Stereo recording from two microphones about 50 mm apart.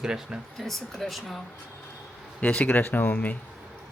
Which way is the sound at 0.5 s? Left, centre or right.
Centre.